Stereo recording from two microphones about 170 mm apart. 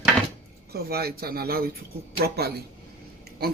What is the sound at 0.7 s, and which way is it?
A man's voice, 65° right (ahead or behind).